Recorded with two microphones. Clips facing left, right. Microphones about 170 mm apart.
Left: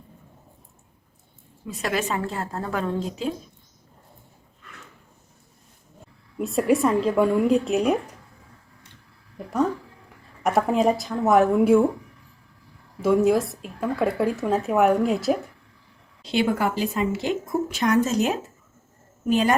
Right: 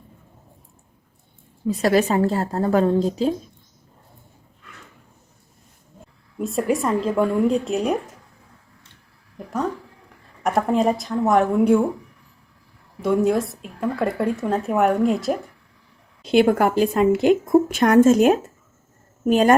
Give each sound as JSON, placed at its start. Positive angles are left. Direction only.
{"t": 1.6, "sound": "a woman's voice", "side_deg": -35}
{"t": 6.4, "sound": "a woman's voice", "side_deg": 0}
{"t": 10.4, "sound": "a woman's voice", "side_deg": 0}
{"t": 13.0, "sound": "a woman's voice", "side_deg": 0}
{"t": 16.3, "sound": "a woman's voice", "side_deg": -55}